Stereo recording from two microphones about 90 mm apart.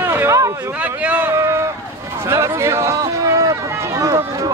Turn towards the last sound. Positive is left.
turn(degrees=-35)  # may be behind; listen again after turning